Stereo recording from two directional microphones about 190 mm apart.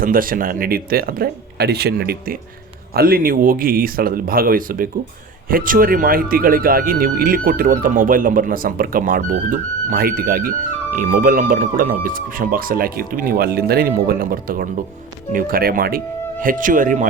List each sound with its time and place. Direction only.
0.0 s speech: 50° right (ahead or behind)